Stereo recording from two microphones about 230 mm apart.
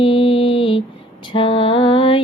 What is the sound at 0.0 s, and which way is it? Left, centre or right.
Mantra, left.